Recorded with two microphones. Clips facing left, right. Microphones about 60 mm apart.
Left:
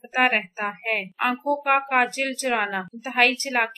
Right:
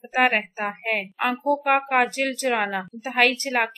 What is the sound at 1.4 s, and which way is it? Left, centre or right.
A woman's voice, centre.